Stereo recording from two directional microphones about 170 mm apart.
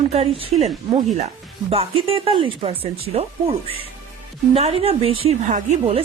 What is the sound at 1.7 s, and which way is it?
A woman's voice, 35° right (ahead or behind).